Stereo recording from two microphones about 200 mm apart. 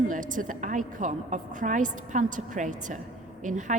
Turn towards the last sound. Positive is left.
turn(degrees=-40)  # may be behind; listen again after turning